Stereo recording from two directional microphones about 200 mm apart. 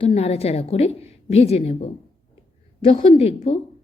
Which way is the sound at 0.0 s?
30° left (ahead or behind).